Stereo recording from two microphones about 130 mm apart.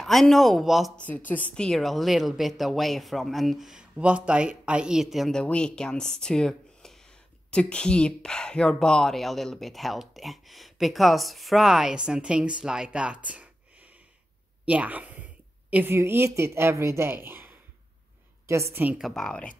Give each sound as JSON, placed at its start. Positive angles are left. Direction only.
{"t": 0.0, "sound": "a woman's voice", "side_deg": 0}
{"t": 0.9, "sound": "a woman's voice", "side_deg": 10}
{"t": 18.9, "sound": "a woman's voice", "side_deg": 0}